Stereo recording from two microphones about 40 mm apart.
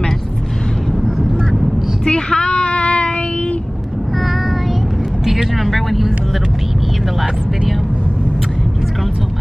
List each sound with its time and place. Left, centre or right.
1.0 s quack: centre
2.0 s child singing: left
5.2 s vehicle: centre